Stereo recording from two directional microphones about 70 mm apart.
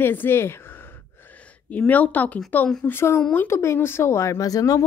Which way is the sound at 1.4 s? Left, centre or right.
Left.